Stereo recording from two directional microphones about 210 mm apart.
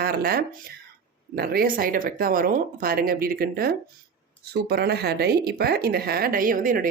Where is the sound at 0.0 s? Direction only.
45° right (ahead or behind).